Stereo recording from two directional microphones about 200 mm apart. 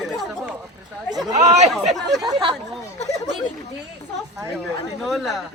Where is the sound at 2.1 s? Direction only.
20° right (ahead or behind).